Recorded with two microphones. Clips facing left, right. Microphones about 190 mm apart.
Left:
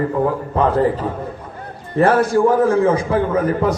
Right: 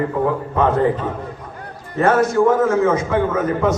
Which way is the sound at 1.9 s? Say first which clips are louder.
Left 1 dB; 30° left (ahead or behind).